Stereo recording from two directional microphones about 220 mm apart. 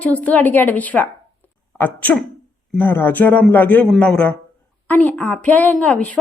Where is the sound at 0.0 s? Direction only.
5° left (ahead or behind).